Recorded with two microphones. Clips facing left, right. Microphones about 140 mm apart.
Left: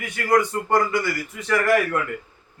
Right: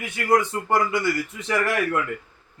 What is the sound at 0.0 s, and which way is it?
A man's voice, 25° right (ahead or behind).